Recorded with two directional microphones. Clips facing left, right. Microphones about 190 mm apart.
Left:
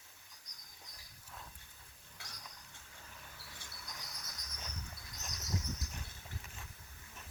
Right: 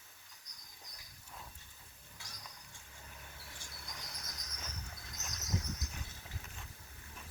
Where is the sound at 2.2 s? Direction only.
60° left (ahead or behind).